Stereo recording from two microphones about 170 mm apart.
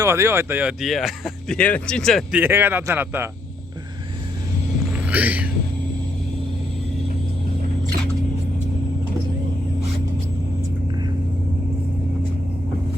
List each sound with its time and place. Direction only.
0.0 s a man's voice: 15° right (ahead or behind)
0.8 s speech: centre (ahead or behind)
2.3 s a man's voice: 10° right (ahead or behind)
5.0 s speech: 10° right (ahead or behind)